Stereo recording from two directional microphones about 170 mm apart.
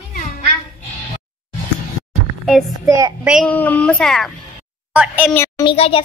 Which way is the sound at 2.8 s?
20° right (ahead or behind).